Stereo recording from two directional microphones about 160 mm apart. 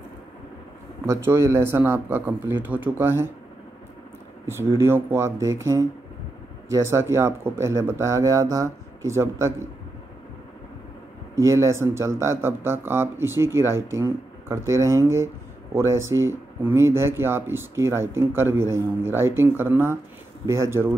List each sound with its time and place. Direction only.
1.0 s speech: 15° right (ahead or behind)
4.5 s speech: 15° right (ahead or behind)
11.3 s speech: 15° right (ahead or behind)